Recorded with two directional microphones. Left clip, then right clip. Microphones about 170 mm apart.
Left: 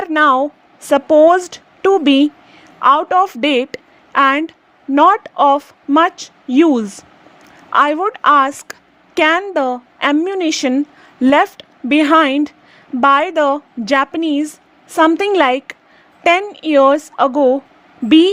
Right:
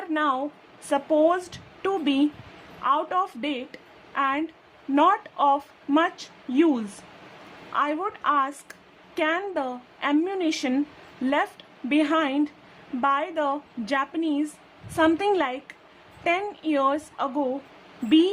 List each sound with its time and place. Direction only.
0.0 s a woman's voice: 50° left (ahead or behind)